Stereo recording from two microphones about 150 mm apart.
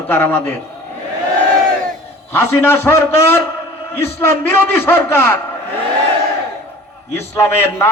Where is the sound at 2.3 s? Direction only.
15° left (ahead or behind).